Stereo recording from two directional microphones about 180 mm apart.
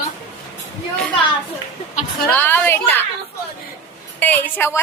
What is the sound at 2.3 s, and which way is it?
Speech, 10° left (ahead or behind).